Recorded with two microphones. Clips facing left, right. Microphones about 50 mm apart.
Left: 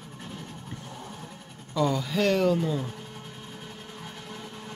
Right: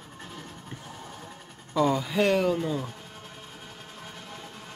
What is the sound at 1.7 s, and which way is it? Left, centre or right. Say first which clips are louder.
Speech: right 2 dB; centre.